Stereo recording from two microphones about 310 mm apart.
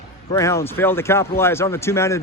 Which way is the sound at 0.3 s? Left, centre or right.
Centre.